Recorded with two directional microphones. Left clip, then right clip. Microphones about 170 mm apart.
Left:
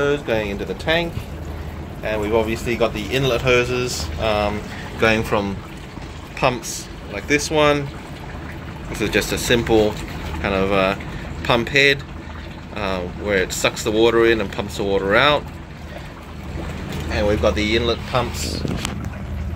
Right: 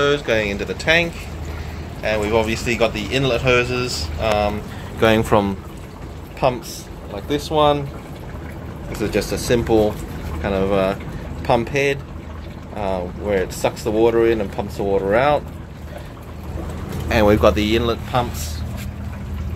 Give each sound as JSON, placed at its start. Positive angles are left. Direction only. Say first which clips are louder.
{"t": 0.0, "sound": "speech", "louder": "right 2 dB", "side_deg": -5}
{"t": 2.0, "sound": "speech", "louder": "right 1 dB", "side_deg": -5}
{"t": 5.0, "sound": "speech", "louder": "right 3 dB", "side_deg": -25}
{"t": 6.4, "sound": "speech", "louder": "even", "side_deg": 0}
{"t": 9.0, "sound": "speech", "louder": "left 1 dB", "side_deg": -10}
{"t": 17.1, "sound": "speech", "louder": "right 5 dB", "side_deg": -50}
{"t": 17.7, "sound": "speech", "louder": "even", "side_deg": -15}